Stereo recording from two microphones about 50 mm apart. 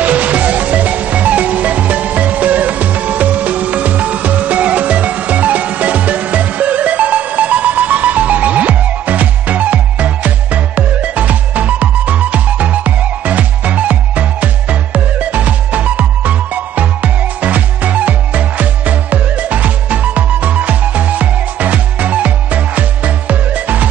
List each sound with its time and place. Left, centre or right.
0.0 s music: right